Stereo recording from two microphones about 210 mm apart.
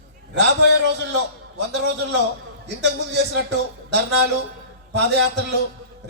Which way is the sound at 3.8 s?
55° right (ahead or behind).